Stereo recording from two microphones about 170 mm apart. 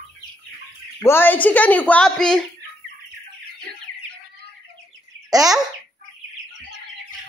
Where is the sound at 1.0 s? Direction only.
15° left (ahead or behind).